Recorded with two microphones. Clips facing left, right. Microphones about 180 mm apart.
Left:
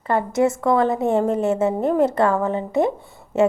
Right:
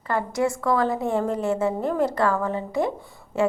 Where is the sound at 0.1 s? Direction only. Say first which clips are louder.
Left 5 dB; 25° left (ahead or behind).